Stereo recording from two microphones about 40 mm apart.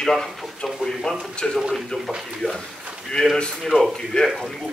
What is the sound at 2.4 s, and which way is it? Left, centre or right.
Speech, left.